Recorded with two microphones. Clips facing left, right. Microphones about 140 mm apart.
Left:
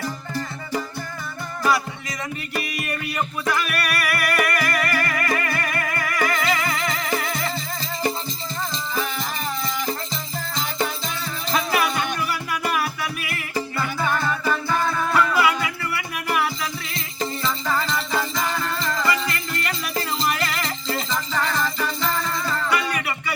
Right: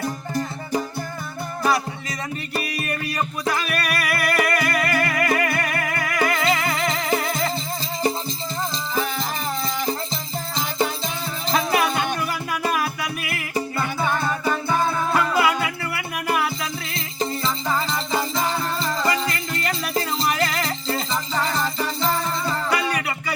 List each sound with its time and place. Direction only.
0.0 s music: 15° right (ahead or behind)
1.6 s music: 30° right (ahead or behind)
8.7 s music: 35° right (ahead or behind)
11.4 s music: 30° right (ahead or behind)
17.7 s music: 15° right (ahead or behind)
17.9 s music: 25° right (ahead or behind)